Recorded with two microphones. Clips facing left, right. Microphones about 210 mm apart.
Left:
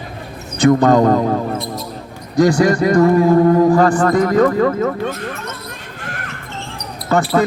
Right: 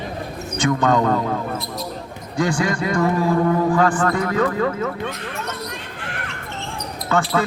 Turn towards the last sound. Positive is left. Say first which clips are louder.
# left 5 dB
turn(degrees=40)  # may be behind; listen again after turning